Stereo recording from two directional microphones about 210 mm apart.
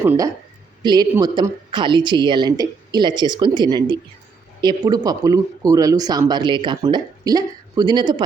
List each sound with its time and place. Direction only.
0.0 s speech: 10° right (ahead or behind)